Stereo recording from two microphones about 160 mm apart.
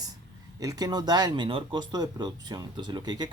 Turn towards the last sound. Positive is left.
turn(degrees=-25)  # may be behind; listen again after turning